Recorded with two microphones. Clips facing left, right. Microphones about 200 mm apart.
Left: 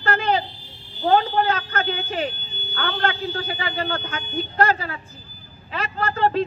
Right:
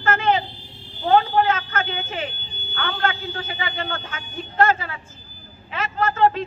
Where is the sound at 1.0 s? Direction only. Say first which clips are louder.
Right 1 dB; 40° left (ahead or behind).